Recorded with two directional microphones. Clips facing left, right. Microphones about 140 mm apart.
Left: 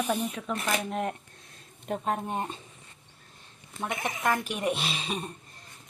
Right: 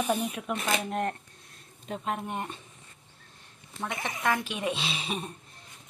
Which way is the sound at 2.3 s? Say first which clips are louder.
Left 2 dB; 25° left (ahead or behind).